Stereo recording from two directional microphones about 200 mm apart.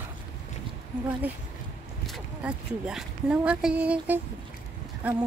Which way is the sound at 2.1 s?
5° right (ahead or behind).